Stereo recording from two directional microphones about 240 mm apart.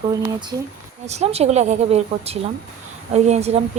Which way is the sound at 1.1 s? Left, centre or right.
Right.